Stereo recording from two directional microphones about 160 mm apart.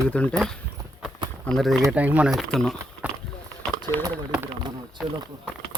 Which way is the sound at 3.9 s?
20° left (ahead or behind).